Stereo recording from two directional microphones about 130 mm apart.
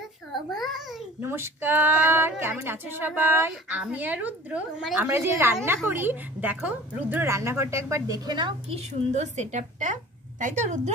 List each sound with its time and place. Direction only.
0.3 s babbling: centre (ahead or behind)
1.2 s a woman's voice: 20° right (ahead or behind); by 10.8 s 70° right (ahead or behind)